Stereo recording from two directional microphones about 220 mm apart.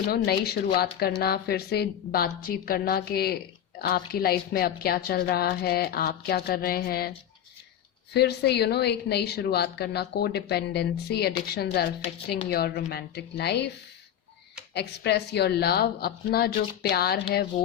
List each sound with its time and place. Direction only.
0.1 s speech: 45° left (ahead or behind)
8.1 s speech: 50° left (ahead or behind)
14.7 s speech: 50° left (ahead or behind)